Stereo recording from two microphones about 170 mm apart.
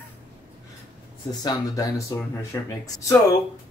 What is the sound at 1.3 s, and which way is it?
Speech, 20° left (ahead or behind).